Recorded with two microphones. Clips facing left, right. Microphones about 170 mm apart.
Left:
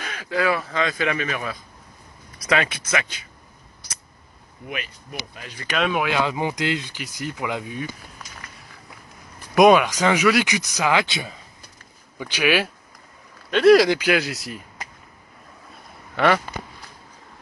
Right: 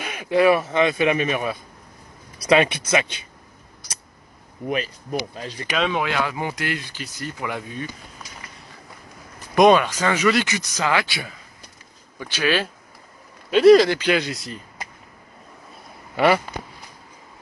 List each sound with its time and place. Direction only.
0.0 s speech: 15° right (ahead or behind)
4.6 s speech: 35° right (ahead or behind)
5.8 s speech: 5° left (ahead or behind)
9.6 s speech: 10° left (ahead or behind)
13.5 s speech: 5° right (ahead or behind)
13.7 s speech: 10° left (ahead or behind)
16.2 s speech: 10° right (ahead or behind)